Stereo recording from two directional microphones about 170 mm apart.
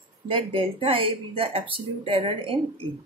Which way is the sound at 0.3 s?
30° right (ahead or behind).